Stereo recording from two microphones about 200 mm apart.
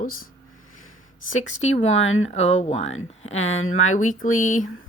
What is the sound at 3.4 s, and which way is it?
Speech, 80° left.